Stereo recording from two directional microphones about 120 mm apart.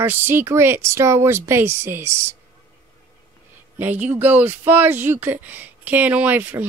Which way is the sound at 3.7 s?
15° right (ahead or behind).